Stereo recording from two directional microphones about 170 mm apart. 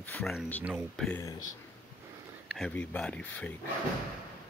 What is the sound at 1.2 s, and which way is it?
Speech, 25° left (ahead or behind).